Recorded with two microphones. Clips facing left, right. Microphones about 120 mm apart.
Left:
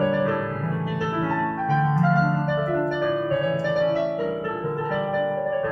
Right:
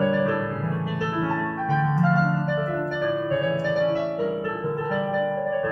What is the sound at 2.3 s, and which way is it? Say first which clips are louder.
Music: left 2 dB; 15° left (ahead or behind).